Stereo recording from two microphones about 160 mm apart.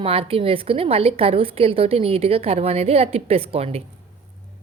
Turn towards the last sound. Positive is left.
turn(degrees=-40)  # may be behind; listen again after turning